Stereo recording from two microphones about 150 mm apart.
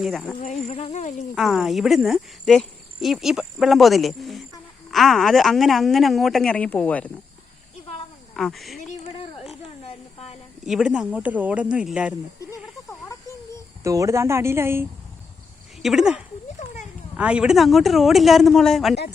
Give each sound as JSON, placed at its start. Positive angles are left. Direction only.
{"t": 0.0, "sound": "speech", "side_deg": 0}
{"t": 0.4, "sound": "speech", "side_deg": 50}
{"t": 1.4, "sound": "speech", "side_deg": 0}
{"t": 8.4, "sound": "speech", "side_deg": 0}
{"t": 9.8, "sound": "a sound", "side_deg": 45}
{"t": 10.7, "sound": "speech", "side_deg": -5}
{"t": 13.8, "sound": "speech", "side_deg": -20}
{"t": 15.8, "sound": "speech", "side_deg": -5}